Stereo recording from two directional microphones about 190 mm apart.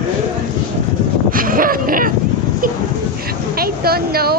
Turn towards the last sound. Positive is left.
turn(degrees=-55)  # may be behind; listen again after turning